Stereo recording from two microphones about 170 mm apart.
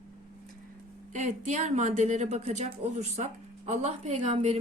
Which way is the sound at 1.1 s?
45° right (ahead or behind).